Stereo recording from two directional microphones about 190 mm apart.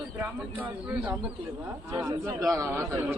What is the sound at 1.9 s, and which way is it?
Speech, 20° right (ahead or behind).